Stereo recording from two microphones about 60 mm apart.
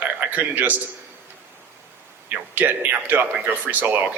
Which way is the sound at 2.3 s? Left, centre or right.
Right.